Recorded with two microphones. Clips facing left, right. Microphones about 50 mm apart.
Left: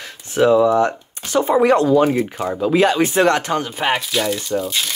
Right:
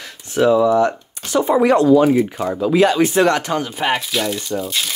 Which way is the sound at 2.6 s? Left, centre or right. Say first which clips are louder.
Right 1 dB; left.